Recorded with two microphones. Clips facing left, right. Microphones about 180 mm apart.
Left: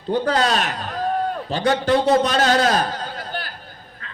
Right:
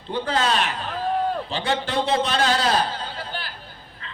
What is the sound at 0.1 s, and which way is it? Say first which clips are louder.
A man's voice: left 4 dB; 40° left (ahead or behind).